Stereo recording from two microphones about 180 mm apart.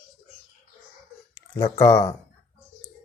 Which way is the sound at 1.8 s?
20° left (ahead or behind).